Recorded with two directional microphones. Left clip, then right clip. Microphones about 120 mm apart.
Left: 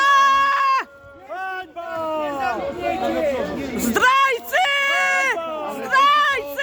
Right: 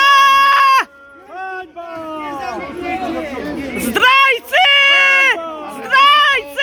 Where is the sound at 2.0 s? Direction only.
25° left (ahead or behind).